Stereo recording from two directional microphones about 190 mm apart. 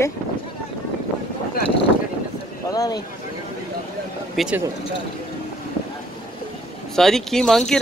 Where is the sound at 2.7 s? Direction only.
20° left (ahead or behind).